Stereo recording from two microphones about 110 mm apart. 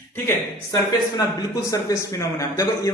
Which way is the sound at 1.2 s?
30° left (ahead or behind).